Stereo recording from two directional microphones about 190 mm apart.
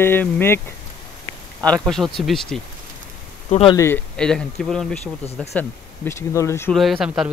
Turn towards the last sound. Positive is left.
turn(degrees=-5)  # may be behind; listen again after turning